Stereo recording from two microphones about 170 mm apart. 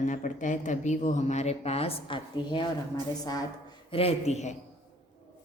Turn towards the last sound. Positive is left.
turn(degrees=40)  # may be behind; listen again after turning